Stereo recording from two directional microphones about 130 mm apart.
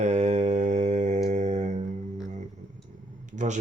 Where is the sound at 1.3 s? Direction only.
65° right (ahead or behind).